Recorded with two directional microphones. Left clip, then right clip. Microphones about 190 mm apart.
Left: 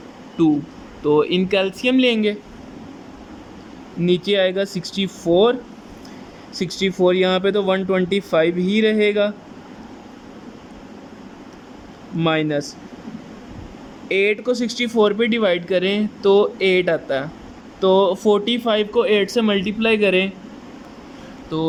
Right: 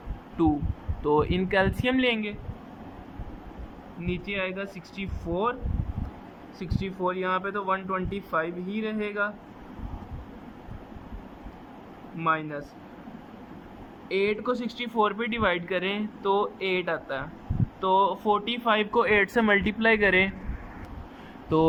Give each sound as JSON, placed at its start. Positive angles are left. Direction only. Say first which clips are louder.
{"t": 1.0, "sound": "speech", "louder": "left 7 dB", "side_deg": 10}
{"t": 4.0, "sound": "speech", "louder": "left 14 dB", "side_deg": 20}
{"t": 6.6, "sound": "speech", "louder": "left 12 dB", "side_deg": 15}
{"t": 12.2, "sound": "speech", "louder": "left 8 dB", "side_deg": 20}
{"t": 14.1, "sound": "speech", "louder": "left 8 dB", "side_deg": 10}
{"t": 21.5, "sound": "speech", "louder": "right 1 dB", "side_deg": -5}